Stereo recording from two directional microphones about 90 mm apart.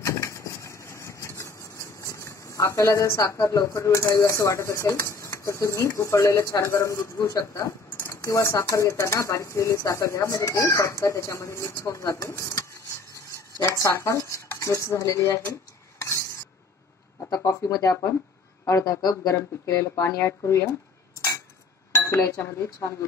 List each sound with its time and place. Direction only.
0.0 s vehicle: 35° left (ahead or behind)
4.1 s speech: 35° left (ahead or behind)
13.7 s speech: 35° left (ahead or behind)
16.0 s stir: 30° left (ahead or behind)
17.3 s speech: 35° left (ahead or behind)
19.3 s speech: 30° left (ahead or behind)
21.9 s speech: 30° left (ahead or behind)